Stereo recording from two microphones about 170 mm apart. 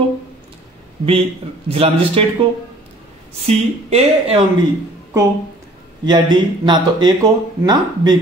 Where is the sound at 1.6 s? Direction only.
35° right (ahead or behind).